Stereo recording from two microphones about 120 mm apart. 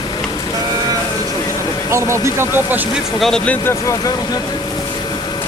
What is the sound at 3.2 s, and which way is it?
Speech, 5° left (ahead or behind).